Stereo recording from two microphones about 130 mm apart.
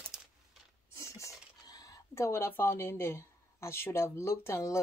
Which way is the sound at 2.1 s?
20° left (ahead or behind).